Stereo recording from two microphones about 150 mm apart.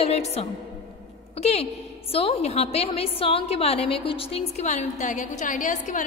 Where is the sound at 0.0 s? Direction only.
45° left (ahead or behind).